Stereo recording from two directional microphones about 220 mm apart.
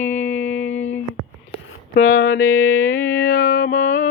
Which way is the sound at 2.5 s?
65° left (ahead or behind).